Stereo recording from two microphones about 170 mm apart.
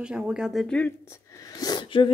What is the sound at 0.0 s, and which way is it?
Speech, 5° right (ahead or behind).